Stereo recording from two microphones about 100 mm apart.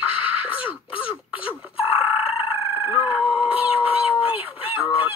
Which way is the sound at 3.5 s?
15° right (ahead or behind).